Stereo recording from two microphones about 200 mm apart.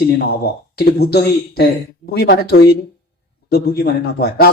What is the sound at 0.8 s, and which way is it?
Speech, 50° left (ahead or behind).